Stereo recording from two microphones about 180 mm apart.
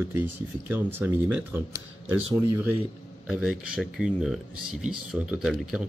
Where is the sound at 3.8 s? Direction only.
5° right (ahead or behind).